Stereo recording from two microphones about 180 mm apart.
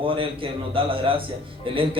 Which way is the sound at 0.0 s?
30° right (ahead or behind).